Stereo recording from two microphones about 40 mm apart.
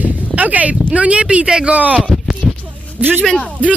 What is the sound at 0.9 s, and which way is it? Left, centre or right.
Speech, right.